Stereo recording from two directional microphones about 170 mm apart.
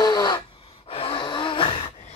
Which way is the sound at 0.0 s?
25° left (ahead or behind).